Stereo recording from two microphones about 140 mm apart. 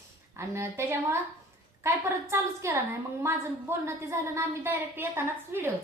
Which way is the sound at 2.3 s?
20° right (ahead or behind).